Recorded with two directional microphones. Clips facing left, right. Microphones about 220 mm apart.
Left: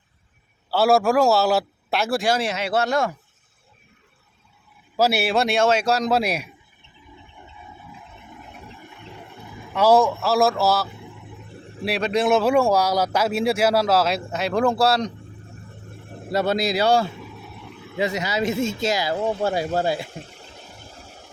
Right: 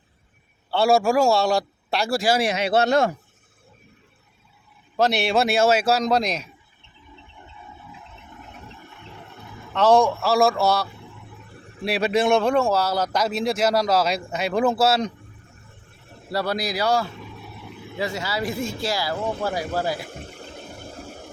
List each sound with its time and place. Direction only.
0.7 s speech: centre (ahead or behind)
2.4 s speech: 15° right (ahead or behind)
4.9 s speech: 5° left (ahead or behind)
8.3 s a sound: 10° left (ahead or behind)
9.1 s speech: 10° left (ahead or behind)
10.8 s vehicle: 20° left (ahead or behind)
11.9 s speech: 5° right (ahead or behind)
15.9 s vehicle: 50° left (ahead or behind)
16.3 s speech: 25° left (ahead or behind)
17.1 s vehicle: 5° left (ahead or behind)
17.9 s speech: 20° left (ahead or behind)
20.2 s a sound: 55° right (ahead or behind)